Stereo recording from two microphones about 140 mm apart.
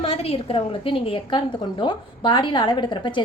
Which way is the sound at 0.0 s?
45° left (ahead or behind).